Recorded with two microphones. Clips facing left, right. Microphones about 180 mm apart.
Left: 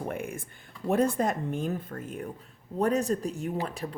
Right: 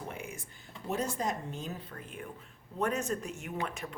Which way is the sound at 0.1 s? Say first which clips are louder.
Left 8 dB; 55° left (ahead or behind).